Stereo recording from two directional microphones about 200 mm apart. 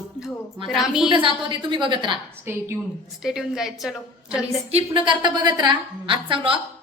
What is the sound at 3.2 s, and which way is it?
Speech, centre (ahead or behind).